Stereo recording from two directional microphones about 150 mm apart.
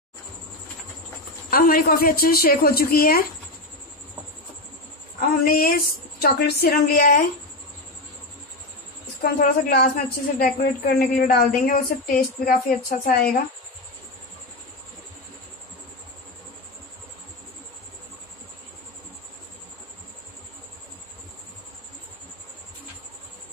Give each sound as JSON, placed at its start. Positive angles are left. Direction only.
{"t": 1.5, "sound": "a woman's voice", "side_deg": 75}
{"t": 5.4, "sound": "a woman's voice", "side_deg": 75}
{"t": 9.2, "sound": "a woman's voice", "side_deg": 70}